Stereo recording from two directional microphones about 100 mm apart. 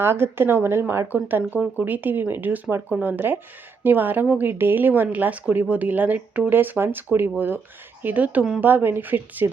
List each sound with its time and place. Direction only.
0.0 s speech: 25° right (ahead or behind)